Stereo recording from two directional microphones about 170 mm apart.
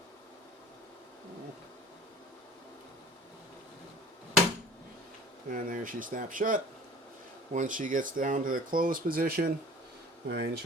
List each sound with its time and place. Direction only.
5.5 s speech: 50° right (ahead or behind); by 10.5 s 70° right (ahead or behind)